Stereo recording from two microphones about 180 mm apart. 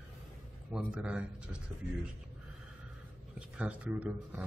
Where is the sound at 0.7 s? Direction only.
5° right (ahead or behind).